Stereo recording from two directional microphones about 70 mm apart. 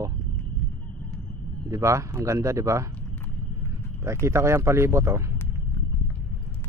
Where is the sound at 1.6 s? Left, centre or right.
Right.